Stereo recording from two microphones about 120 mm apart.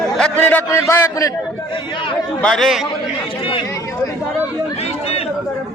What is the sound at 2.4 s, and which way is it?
Speech, 5° left (ahead or behind).